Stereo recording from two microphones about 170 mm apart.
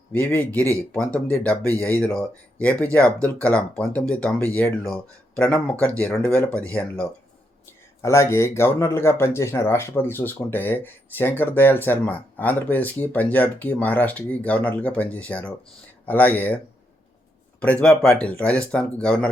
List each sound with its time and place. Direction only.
0.1 s speech: 10° left (ahead or behind)
0.6 s speech: 15° right (ahead or behind)
0.9 s speech: 10° left (ahead or behind)
8.0 s speech: 15° left (ahead or behind)
17.6 s speech: 5° left (ahead or behind)